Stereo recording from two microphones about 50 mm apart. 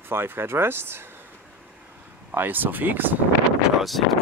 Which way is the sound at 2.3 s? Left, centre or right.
Right.